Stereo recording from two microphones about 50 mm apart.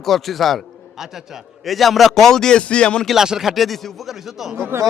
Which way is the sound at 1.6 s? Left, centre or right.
Centre.